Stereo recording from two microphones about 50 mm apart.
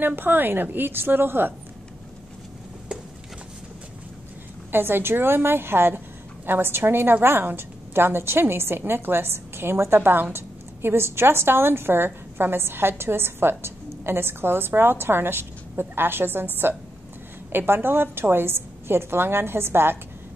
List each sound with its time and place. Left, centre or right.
0.0 s a woman's voice: right
4.7 s a woman's voice: right
17.5 s a woman's voice: right